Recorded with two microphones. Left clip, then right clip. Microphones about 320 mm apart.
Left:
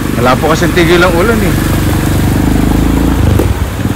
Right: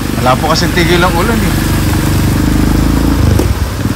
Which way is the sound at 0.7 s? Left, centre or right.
Centre.